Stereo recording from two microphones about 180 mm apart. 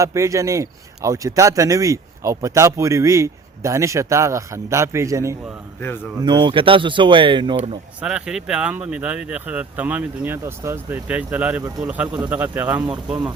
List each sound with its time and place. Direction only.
0.0 s speech: 15° right (ahead or behind)
8.0 s speech: 5° right (ahead or behind)